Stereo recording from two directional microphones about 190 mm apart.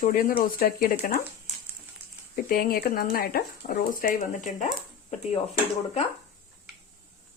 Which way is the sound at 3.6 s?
35° left (ahead or behind).